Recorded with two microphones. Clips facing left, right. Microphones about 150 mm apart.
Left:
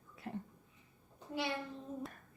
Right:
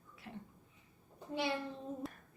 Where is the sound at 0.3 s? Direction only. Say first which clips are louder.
Left 6 dB; 40° left (ahead or behind).